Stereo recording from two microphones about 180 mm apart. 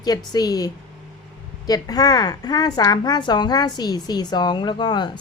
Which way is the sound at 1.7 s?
20° left (ahead or behind).